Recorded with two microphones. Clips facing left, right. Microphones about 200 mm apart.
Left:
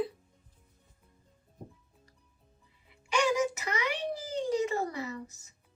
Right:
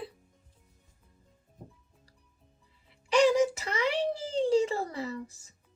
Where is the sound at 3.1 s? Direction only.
35° right (ahead or behind).